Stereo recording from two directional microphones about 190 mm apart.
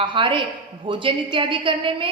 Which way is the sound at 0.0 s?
25° right (ahead or behind).